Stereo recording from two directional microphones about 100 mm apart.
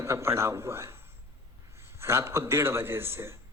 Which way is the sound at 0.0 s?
25° right (ahead or behind).